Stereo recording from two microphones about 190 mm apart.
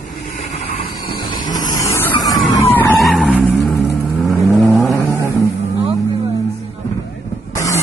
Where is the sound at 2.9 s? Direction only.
Centre (ahead or behind).